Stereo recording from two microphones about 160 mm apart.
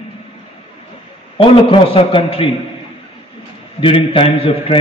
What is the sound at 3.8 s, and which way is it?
Speech, 35° left (ahead or behind).